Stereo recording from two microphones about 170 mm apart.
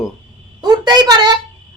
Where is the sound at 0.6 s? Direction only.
25° right (ahead or behind).